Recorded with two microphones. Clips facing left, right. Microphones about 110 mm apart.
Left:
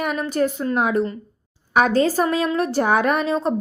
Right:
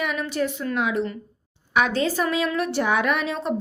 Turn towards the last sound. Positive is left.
turn(degrees=35)  # may be behind; listen again after turning